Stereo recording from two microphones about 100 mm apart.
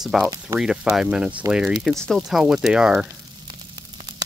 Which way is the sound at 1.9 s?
5° left (ahead or behind).